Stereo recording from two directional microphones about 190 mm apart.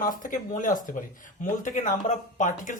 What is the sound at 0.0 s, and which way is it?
Speech, 45° left (ahead or behind).